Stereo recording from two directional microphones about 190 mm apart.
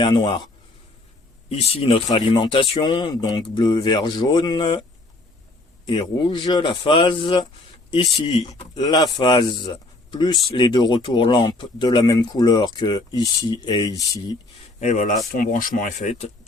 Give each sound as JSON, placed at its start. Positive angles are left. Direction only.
{"t": 0.0, "sound": "speech", "side_deg": 25}
{"t": 1.5, "sound": "speech", "side_deg": 30}
{"t": 8.4, "sound": "speech", "side_deg": 20}
{"t": 14.8, "sound": "speech", "side_deg": 40}